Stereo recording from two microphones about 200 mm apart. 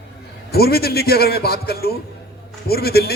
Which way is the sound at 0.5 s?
50° left (ahead or behind).